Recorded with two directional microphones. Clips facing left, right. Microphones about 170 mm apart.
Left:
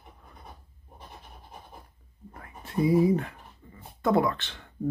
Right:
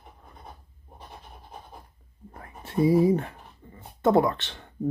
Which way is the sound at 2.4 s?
30° right (ahead or behind).